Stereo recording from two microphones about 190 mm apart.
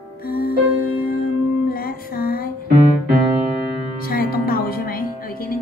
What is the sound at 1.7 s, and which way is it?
Music, 50° left (ahead or behind).